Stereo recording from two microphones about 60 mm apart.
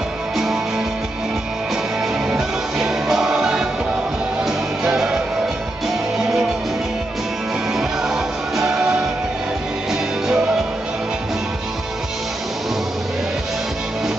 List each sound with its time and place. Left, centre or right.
2.2 s music: centre
7.7 s music: centre